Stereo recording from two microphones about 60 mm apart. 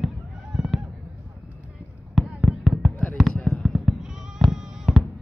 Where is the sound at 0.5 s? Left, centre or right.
Centre.